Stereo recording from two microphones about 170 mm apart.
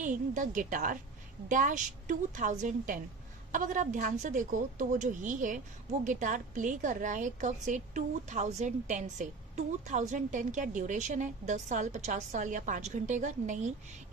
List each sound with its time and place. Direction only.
0.0 s a woman's voice: 50° right (ahead or behind)